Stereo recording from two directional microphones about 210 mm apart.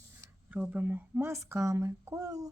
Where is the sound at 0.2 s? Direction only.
5° right (ahead or behind).